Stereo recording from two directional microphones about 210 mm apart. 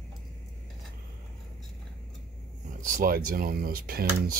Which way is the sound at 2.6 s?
40° right (ahead or behind).